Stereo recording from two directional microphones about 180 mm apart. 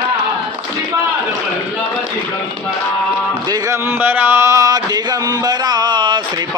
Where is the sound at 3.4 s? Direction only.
20° right (ahead or behind).